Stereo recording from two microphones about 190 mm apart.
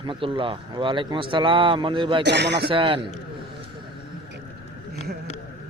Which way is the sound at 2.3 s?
65° right (ahead or behind).